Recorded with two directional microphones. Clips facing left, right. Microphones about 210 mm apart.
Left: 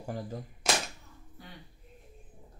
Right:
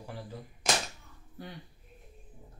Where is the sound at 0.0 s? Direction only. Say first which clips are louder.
Left 5 dB; 45° left (ahead or behind).